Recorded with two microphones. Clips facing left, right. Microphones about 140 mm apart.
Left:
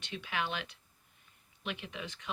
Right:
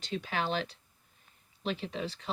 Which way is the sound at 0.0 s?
40° right (ahead or behind).